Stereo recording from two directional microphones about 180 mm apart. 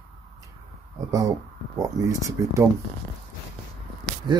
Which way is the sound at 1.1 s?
20° right (ahead or behind).